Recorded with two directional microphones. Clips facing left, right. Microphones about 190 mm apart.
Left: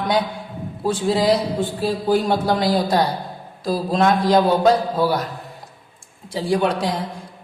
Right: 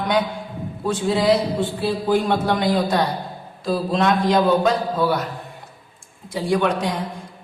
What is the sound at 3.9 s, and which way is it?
Speech, 40° left (ahead or behind).